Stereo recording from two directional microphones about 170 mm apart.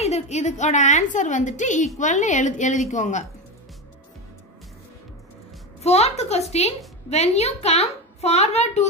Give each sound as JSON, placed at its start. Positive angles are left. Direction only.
{"t": 0.0, "sound": "a woman's voice", "side_deg": 40}
{"t": 5.8, "sound": "a woman's voice", "side_deg": 40}